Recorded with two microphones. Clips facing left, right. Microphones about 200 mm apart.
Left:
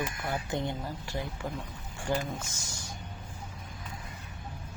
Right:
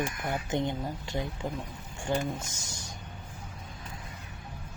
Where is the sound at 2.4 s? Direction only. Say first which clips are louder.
Even; 20° right (ahead or behind).